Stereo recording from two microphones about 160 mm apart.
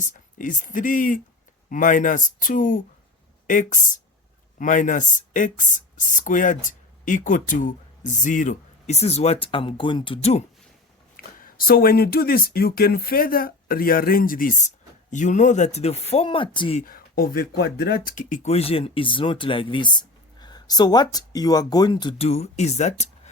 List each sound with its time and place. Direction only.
0.0 s speech: 55° left (ahead or behind)
11.3 s speech: 65° left (ahead or behind); by 16.8 s 35° left (ahead or behind)
16.8 s speech: 65° left (ahead or behind); by 22.3 s 25° left (ahead or behind)
22.3 s speech: 45° left (ahead or behind)